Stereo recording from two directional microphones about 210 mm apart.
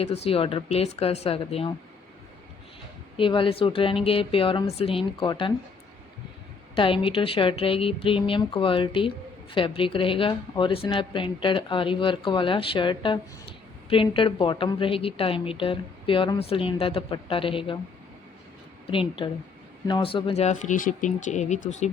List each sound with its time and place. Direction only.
0.0 s speech: 30° left (ahead or behind)
3.2 s speech: 25° left (ahead or behind)
6.7 s speech: 25° left (ahead or behind)
18.9 s speech: 25° left (ahead or behind)